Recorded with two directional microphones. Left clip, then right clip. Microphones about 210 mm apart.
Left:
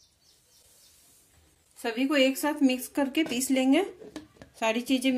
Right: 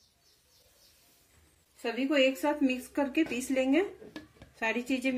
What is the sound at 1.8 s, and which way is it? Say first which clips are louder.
A woman's voice: left 2 dB; 35° left (ahead or behind).